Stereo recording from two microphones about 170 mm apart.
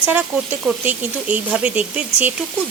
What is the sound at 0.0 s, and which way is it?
Speech, 10° right (ahead or behind).